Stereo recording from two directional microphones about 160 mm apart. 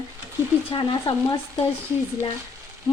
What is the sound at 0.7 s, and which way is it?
Speech, 30° left (ahead or behind).